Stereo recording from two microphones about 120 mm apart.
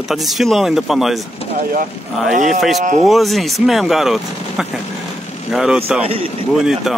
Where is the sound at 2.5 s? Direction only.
Centre (ahead or behind).